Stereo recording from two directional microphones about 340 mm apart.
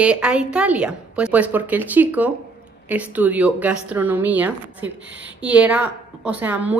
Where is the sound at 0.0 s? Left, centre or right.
Centre.